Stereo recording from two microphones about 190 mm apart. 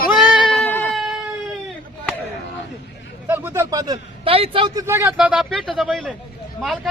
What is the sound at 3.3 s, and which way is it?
A man's voice, 10° right (ahead or behind).